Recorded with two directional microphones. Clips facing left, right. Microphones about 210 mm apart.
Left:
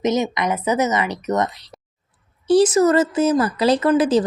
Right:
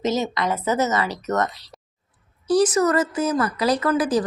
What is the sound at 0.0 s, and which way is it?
Speech, 20° left (ahead or behind).